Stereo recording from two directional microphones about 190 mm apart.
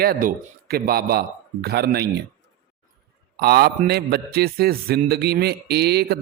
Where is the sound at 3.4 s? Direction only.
55° right (ahead or behind).